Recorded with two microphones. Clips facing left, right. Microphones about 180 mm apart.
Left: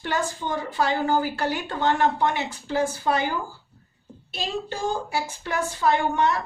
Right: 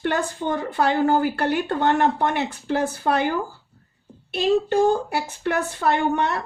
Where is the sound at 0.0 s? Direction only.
55° right (ahead or behind).